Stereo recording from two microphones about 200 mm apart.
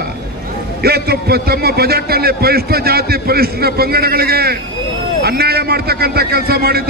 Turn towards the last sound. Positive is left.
turn(degrees=-50)  # may be behind; listen again after turning